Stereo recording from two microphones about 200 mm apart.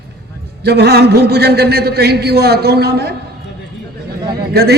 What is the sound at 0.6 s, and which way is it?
A man's voice, 55° right (ahead or behind).